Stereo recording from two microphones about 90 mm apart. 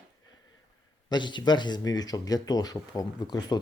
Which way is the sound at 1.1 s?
55° left (ahead or behind).